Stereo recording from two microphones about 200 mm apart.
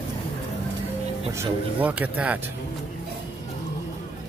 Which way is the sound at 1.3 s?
10° right (ahead or behind).